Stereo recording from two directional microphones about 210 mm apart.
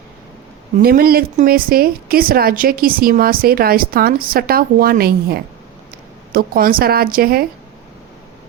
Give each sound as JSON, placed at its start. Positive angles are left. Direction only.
{"t": 0.8, "sound": "a woman's voice", "side_deg": -45}